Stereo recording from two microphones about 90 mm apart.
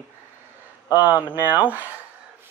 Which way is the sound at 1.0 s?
20° right (ahead or behind).